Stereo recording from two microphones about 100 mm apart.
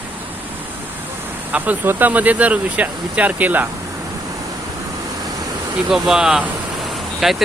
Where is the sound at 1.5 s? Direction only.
15° right (ahead or behind).